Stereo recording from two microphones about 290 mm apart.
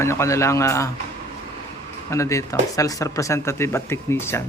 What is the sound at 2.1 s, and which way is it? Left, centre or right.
Speech, centre.